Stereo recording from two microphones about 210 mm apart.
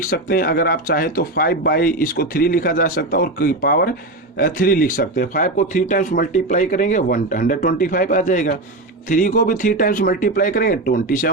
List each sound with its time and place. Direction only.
0.0 s speech: 45° left (ahead or behind)